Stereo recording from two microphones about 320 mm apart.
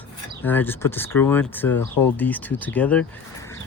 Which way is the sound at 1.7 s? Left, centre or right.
Left.